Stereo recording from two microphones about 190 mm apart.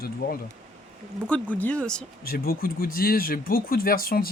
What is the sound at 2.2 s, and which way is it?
Speech, 50° left (ahead or behind).